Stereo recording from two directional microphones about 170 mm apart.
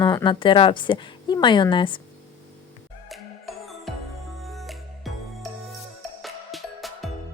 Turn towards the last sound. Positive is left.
turn(degrees=0)  # may be behind; listen again after turning